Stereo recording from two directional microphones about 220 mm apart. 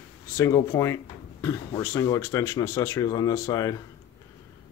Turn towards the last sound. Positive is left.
turn(degrees=15)  # may be behind; listen again after turning